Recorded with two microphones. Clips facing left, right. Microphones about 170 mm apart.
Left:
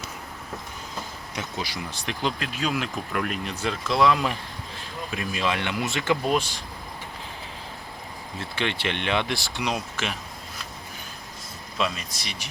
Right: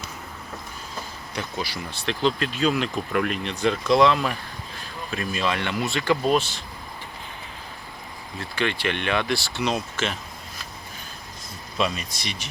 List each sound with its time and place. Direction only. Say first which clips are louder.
1.4 s speech: right 2 dB; 20° left (ahead or behind)
8.4 s speech: right 2 dB; 25° left (ahead or behind)
11.8 s speech: right 2 dB; centre (ahead or behind)